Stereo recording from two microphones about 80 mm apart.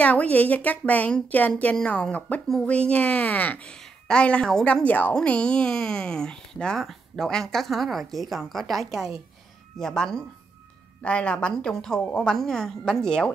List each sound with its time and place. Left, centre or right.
0.0 s a woman's voice: centre
4.8 s speech: left
12.0 s speech: centre
12.3 s speech: centre